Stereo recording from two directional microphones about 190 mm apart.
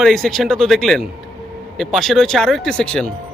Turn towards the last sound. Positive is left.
turn(degrees=5)  # may be behind; listen again after turning